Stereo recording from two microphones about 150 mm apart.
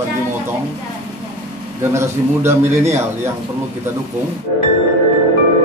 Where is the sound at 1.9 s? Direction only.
20° right (ahead or behind).